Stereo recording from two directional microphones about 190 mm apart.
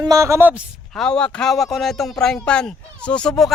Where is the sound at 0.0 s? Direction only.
15° right (ahead or behind).